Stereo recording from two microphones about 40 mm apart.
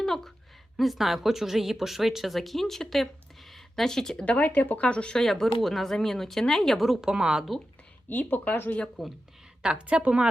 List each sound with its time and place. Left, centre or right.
0.0 s speech: centre
0.8 s a woman's voice: centre
4.4 s speech: left
4.8 s speech: left
5.2 s speech: centre
7.0 s speech: centre
8.1 s speech: left
9.0 s a woman's voice: centre
9.8 s speech: right